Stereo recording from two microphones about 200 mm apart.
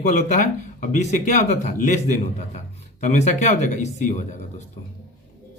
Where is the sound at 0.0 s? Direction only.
40° left (ahead or behind).